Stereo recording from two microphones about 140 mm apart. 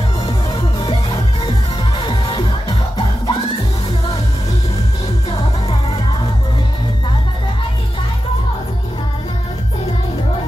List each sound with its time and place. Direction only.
0.6 s music: 30° left (ahead or behind)